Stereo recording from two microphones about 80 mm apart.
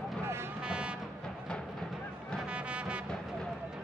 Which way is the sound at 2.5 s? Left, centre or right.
Centre.